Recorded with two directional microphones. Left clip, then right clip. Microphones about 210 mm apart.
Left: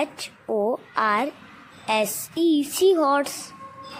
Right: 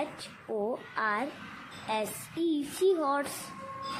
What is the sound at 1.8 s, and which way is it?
Speech, 35° left (ahead or behind).